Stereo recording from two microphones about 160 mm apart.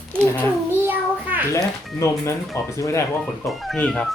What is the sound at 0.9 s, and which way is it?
Child singing, 10° right (ahead or behind).